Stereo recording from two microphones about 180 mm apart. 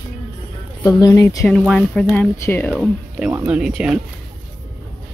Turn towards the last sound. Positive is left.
turn(degrees=-5)  # may be behind; listen again after turning